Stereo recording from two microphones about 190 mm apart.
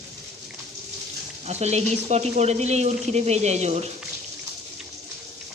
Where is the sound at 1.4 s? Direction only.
35° right (ahead or behind).